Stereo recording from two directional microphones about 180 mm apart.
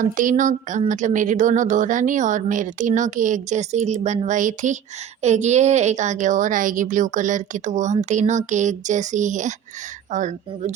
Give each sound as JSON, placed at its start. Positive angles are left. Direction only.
{"t": 0.0, "sound": "a woman's voice", "side_deg": -45}